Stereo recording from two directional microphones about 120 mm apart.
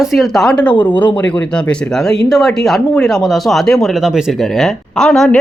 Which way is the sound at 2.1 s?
Centre (ahead or behind).